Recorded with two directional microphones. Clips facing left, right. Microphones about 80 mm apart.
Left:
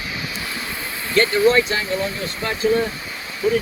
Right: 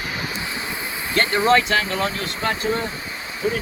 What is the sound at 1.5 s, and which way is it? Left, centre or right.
Speech, right.